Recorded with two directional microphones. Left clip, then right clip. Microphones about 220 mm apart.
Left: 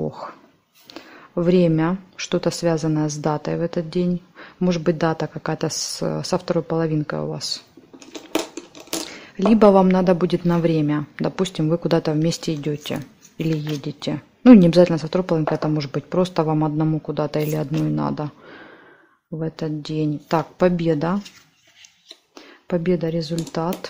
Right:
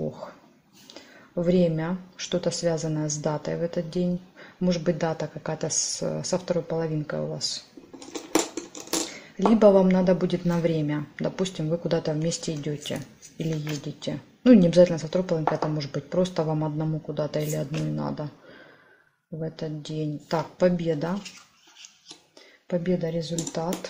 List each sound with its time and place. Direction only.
0.9 s speech: 40° left (ahead or behind)
9.6 s speech: 40° left (ahead or behind)
19.4 s speech: 30° left (ahead or behind)
22.7 s speech: 40° left (ahead or behind)